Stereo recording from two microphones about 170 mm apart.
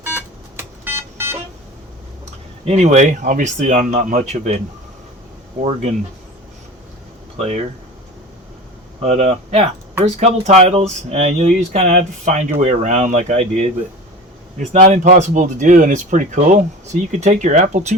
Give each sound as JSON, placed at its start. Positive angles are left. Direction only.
{"t": 0.0, "sound": "a sound", "side_deg": -10}
{"t": 2.6, "sound": "speech", "side_deg": -40}
{"t": 7.3, "sound": "speech", "side_deg": -35}
{"t": 9.0, "sound": "speech", "side_deg": -35}
{"t": 15.0, "sound": "speech", "side_deg": -45}